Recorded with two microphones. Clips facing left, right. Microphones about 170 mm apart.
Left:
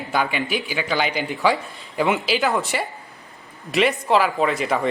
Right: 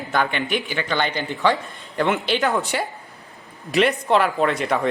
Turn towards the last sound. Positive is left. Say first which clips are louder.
# even
turn(degrees=0)  # may be behind; listen again after turning